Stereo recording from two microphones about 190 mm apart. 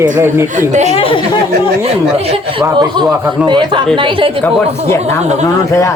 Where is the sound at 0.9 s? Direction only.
30° left (ahead or behind).